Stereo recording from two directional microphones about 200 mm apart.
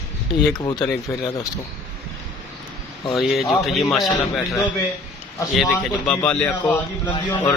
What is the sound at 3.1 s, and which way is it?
A man's voice, centre (ahead or behind).